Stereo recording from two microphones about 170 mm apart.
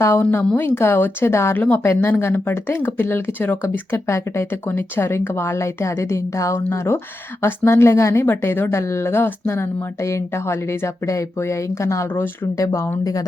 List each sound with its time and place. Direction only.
0.0 s speech: 15° left (ahead or behind)